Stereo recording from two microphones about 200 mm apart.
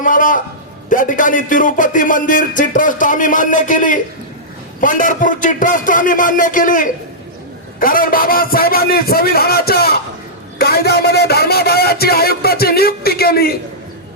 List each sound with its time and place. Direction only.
0.0 s speech: 40° left (ahead or behind)